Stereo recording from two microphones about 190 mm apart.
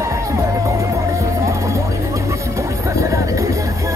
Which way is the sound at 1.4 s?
15° right (ahead or behind).